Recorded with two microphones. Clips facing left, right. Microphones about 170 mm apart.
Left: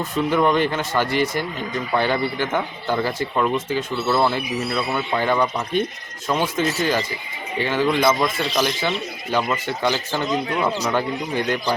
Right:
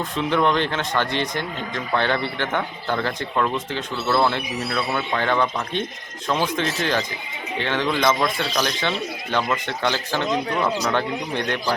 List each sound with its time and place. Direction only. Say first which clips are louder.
0.2 s speech: left 2 dB; 10° left (ahead or behind)
10.6 s speech: left 1 dB; 15° left (ahead or behind)
11.3 s speech: left 4 dB; 5° left (ahead or behind)